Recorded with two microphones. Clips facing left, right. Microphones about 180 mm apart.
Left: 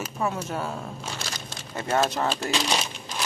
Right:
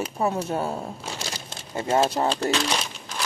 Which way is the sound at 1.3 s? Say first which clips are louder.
Right 2 dB; 25° right (ahead or behind).